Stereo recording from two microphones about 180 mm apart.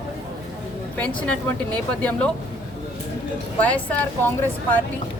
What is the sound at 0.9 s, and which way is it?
A woman's voice, 10° left (ahead or behind).